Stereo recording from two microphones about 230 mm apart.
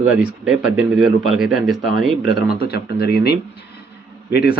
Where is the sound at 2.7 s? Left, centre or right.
Left.